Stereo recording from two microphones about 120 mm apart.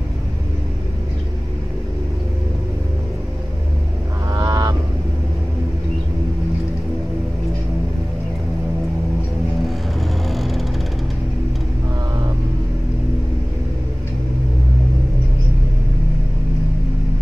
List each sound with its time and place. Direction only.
4.3 s goose: 30° right (ahead or behind)
10.3 s music: centre (ahead or behind)